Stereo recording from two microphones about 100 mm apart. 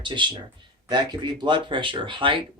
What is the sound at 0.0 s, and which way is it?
Speech, 55° right (ahead or behind).